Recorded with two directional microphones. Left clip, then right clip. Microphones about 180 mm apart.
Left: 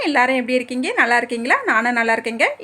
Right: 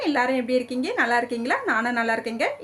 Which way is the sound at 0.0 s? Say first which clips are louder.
Left 6 dB; 30° left (ahead or behind).